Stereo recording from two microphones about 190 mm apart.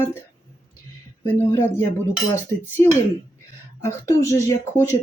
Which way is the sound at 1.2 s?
15° left (ahead or behind).